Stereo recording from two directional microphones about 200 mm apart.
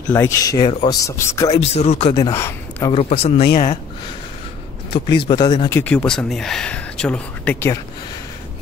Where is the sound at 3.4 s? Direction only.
50° left (ahead or behind).